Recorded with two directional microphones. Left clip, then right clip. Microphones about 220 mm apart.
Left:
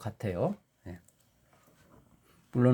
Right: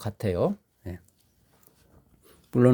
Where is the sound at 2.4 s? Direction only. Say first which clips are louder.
Right 6 dB; 50° right (ahead or behind).